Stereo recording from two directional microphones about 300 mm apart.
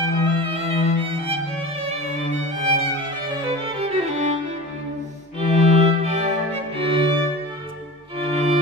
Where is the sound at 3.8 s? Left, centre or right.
Centre.